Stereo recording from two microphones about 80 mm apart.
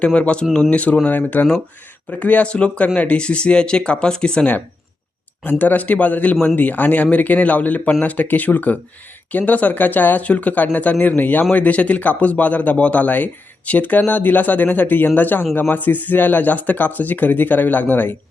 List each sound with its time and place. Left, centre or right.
0.0 s speech: centre
5.4 s speech: left